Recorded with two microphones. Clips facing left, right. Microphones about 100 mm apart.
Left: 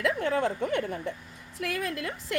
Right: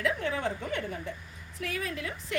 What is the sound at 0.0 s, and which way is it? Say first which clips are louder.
A woman's voice: left 4 dB; 50° left (ahead or behind).